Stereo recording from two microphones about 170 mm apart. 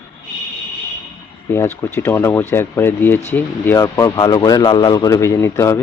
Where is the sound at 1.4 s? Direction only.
15° left (ahead or behind).